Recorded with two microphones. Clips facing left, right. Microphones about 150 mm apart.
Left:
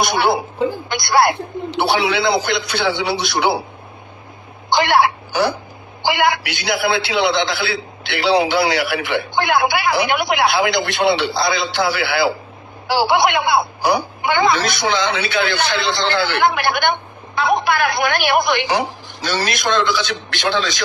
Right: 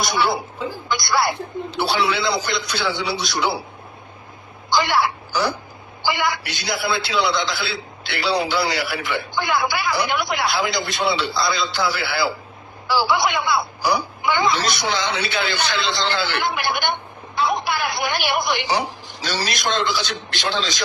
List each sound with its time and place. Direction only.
0.0 s a man's voice: 60° left (ahead or behind)
4.7 s a woman's voice: 65° left (ahead or behind)